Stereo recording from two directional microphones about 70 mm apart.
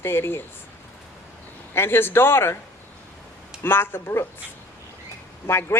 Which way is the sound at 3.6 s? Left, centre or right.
Left.